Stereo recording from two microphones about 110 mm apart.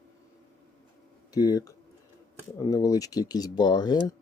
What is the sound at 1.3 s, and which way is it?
Speech, 35° left (ahead or behind).